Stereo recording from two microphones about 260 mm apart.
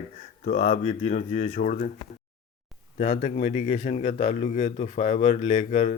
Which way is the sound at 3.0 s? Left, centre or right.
Left.